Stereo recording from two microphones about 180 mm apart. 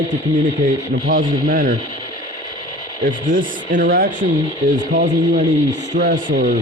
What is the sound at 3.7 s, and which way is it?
Speech, 55° right (ahead or behind).